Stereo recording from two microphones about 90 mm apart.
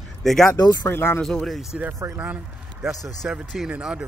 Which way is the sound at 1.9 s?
30° right (ahead or behind).